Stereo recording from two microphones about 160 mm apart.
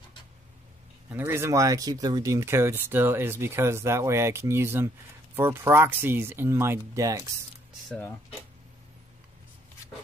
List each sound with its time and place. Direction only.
1.1 s speech: 15° right (ahead or behind)